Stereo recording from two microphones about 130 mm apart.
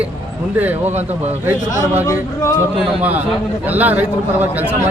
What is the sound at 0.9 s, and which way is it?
Speech, 60° right (ahead or behind).